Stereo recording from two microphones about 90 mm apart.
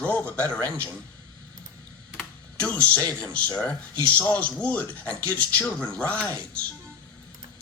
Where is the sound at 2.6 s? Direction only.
15° left (ahead or behind).